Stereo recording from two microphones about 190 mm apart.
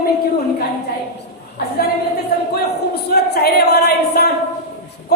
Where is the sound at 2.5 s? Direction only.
55° left (ahead or behind).